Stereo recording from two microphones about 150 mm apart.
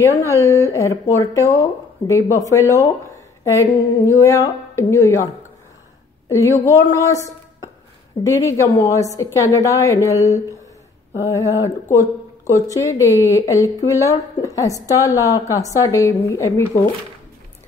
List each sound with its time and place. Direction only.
0.0 s speech: 20° left (ahead or behind)